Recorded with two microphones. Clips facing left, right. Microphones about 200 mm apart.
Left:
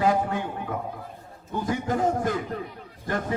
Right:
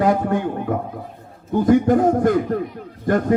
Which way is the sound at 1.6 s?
55° right (ahead or behind).